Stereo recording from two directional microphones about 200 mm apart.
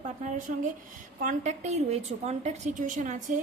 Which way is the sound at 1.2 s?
40° right (ahead or behind).